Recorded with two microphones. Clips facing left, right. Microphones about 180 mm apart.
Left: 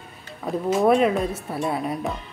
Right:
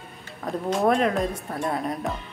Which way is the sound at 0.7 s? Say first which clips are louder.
Left 3 dB; 5° left (ahead or behind).